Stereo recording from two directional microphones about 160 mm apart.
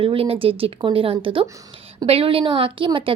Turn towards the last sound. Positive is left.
turn(degrees=-30)  # may be behind; listen again after turning